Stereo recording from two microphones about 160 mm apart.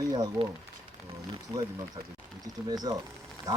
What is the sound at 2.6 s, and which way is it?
Speech, 25° right (ahead or behind).